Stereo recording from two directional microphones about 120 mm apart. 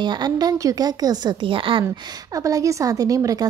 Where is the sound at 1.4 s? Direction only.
45° right (ahead or behind).